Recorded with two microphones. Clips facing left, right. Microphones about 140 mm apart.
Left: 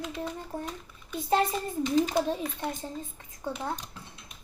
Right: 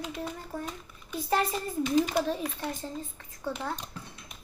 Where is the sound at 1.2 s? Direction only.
20° left (ahead or behind).